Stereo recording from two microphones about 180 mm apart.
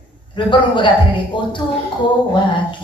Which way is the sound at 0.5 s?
25° left (ahead or behind).